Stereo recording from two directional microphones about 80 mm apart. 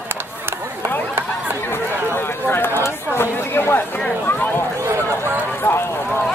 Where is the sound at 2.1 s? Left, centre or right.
Left.